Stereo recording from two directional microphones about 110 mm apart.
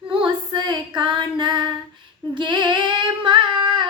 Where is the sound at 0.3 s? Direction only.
45° right (ahead or behind).